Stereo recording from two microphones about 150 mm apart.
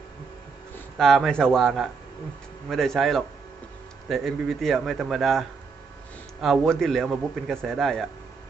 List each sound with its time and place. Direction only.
0.9 s a man's voice: centre (ahead or behind)